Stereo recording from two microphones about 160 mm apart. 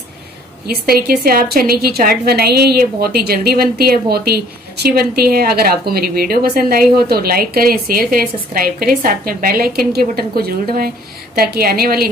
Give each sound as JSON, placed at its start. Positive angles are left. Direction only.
{"t": 0.7, "sound": "a woman's voice", "side_deg": -75}